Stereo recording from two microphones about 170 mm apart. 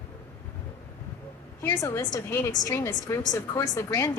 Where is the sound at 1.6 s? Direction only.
15° left (ahead or behind).